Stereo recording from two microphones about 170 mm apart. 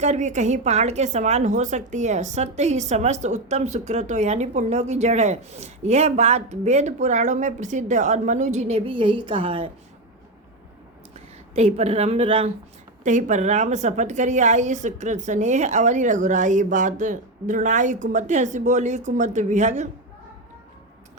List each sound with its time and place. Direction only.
0.0 s speech: 45° right (ahead or behind)
11.5 s speech: 40° right (ahead or behind)
13.1 s a woman's voice: 45° right (ahead or behind)